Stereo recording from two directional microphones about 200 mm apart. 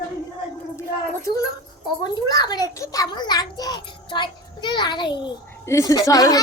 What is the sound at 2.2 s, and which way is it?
A child's voice, 20° left (ahead or behind).